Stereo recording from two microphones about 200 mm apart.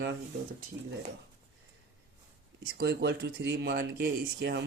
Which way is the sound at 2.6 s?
55° right (ahead or behind).